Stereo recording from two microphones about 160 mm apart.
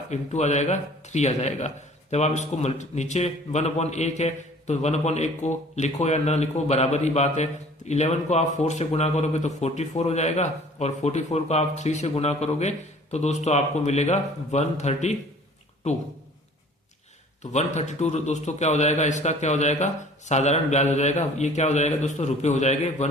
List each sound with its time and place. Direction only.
0.1 s a man's voice: 45° left (ahead or behind)
17.5 s a man's voice: 45° left (ahead or behind)